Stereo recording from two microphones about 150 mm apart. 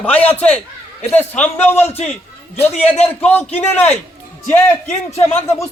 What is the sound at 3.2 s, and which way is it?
Speech, 10° left (ahead or behind).